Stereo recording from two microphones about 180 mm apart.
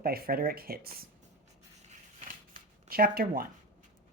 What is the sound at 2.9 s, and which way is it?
Speech, 55° right (ahead or behind).